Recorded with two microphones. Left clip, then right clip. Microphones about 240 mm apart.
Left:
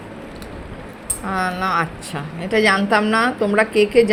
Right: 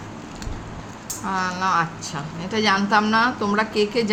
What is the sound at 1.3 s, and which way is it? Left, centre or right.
A woman's voice, centre.